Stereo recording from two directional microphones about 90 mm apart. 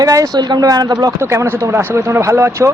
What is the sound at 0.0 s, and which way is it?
Speech, 40° right (ahead or behind).